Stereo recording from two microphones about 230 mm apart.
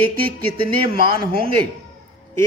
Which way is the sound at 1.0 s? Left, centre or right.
Right.